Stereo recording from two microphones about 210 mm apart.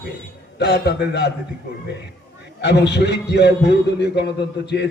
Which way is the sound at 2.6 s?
55° left (ahead or behind).